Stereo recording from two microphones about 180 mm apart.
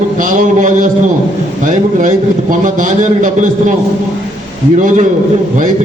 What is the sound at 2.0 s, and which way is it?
A man's voice, 45° right (ahead or behind).